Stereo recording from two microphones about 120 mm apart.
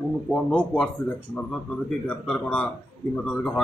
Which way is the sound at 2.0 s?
10° left (ahead or behind).